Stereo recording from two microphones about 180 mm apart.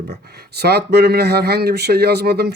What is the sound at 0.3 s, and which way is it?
Speech, 65° right (ahead or behind).